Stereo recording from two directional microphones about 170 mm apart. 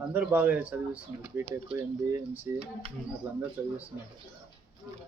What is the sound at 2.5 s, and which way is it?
Speech, 10° right (ahead or behind).